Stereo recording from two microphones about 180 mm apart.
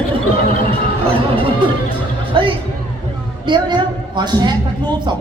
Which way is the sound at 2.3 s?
25° right (ahead or behind).